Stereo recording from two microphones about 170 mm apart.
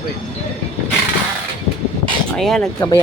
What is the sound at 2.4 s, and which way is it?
Speech, centre (ahead or behind).